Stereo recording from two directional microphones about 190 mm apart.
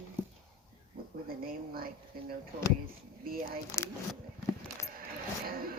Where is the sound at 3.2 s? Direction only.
50° right (ahead or behind).